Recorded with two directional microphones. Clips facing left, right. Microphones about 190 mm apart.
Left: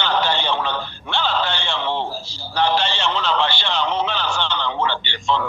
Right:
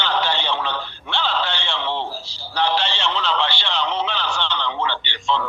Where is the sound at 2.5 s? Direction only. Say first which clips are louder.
Left 2 dB; 45° left (ahead or behind).